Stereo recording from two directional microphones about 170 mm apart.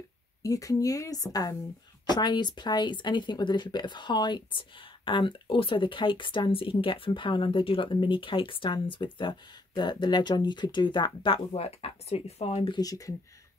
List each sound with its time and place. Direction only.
0.4 s speech: 20° left (ahead or behind); by 12.7 s 35° left (ahead or behind)
12.7 s speech: 20° left (ahead or behind)